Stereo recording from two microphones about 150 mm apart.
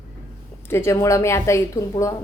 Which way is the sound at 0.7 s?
20° left (ahead or behind).